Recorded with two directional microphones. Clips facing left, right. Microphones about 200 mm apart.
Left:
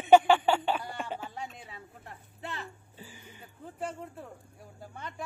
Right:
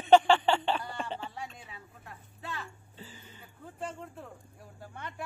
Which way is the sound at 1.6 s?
30° left (ahead or behind).